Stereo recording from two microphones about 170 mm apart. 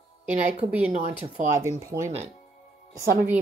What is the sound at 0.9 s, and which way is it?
Speech, 40° right (ahead or behind).